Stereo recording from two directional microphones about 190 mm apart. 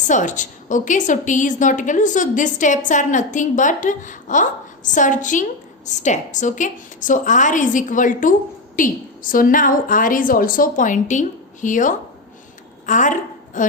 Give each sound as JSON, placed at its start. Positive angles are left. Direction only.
{"t": 0.1, "sound": "a woman's voice", "side_deg": 40}